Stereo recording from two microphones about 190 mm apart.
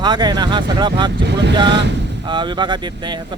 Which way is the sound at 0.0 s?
20° right (ahead or behind).